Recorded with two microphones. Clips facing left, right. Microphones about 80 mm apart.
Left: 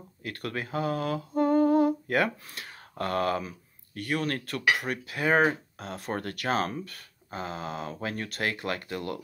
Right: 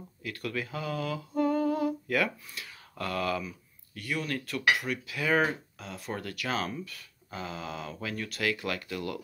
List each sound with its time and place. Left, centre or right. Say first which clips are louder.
0.2 s speech: left 1 dB; left